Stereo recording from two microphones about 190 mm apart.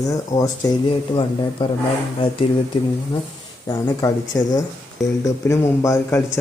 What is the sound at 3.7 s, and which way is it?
Speech, 20° left (ahead or behind).